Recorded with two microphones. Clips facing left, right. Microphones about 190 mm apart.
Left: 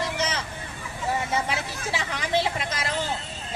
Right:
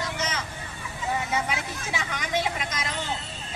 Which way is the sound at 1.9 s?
30° left (ahead or behind).